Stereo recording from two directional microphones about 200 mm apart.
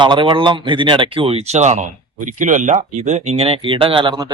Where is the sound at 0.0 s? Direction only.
25° right (ahead or behind).